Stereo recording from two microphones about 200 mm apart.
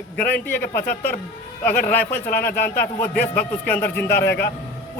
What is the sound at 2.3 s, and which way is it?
A man's voice, 50° left (ahead or behind).